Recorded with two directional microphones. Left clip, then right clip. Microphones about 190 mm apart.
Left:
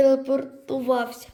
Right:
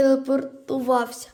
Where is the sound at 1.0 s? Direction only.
55° right (ahead or behind).